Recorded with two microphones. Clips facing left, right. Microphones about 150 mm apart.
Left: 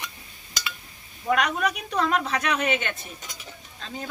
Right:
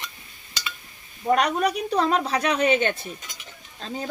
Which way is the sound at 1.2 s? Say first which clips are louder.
Right 3 dB; 35° right (ahead or behind).